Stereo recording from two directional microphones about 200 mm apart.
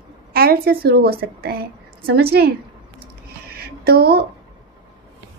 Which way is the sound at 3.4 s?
50° right (ahead or behind).